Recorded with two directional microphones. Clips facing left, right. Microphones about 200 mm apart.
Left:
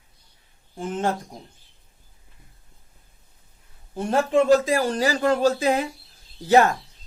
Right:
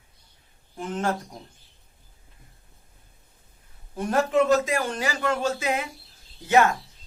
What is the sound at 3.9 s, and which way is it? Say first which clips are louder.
Speech: left 2 dB; 30° left (ahead or behind).